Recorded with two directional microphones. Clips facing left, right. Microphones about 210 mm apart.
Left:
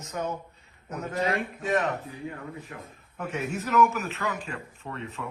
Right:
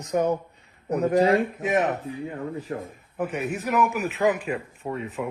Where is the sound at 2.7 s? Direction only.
40° right (ahead or behind).